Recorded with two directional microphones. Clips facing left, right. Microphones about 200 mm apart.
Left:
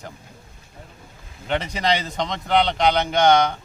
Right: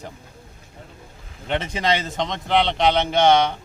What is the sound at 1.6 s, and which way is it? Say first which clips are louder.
Speech: right 2 dB; centre (ahead or behind).